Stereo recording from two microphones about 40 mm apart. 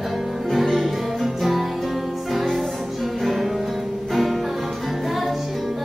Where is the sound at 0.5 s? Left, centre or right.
Centre.